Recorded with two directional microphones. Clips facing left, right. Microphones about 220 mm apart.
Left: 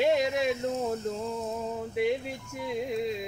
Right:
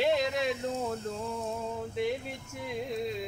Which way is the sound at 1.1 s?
10° left (ahead or behind).